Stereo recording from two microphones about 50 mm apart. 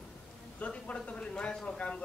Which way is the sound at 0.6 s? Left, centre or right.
Left.